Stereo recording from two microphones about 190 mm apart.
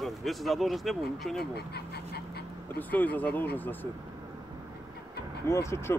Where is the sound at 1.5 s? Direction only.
60° left (ahead or behind).